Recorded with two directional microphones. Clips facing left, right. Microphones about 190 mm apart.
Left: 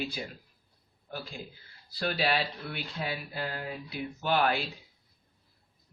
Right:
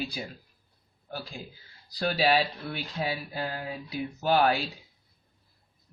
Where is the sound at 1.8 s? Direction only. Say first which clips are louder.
Right 4 dB; 40° right (ahead or behind).